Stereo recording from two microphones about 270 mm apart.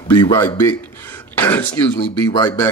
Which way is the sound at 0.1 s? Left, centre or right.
Centre.